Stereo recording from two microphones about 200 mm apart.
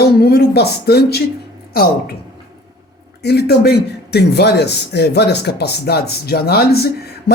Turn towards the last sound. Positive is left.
turn(degrees=50)  # may be behind; listen again after turning